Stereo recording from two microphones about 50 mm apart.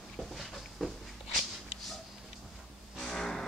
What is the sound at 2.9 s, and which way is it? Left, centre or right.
Music, centre.